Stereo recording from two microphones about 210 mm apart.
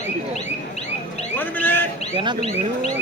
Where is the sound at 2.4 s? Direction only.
30° left (ahead or behind).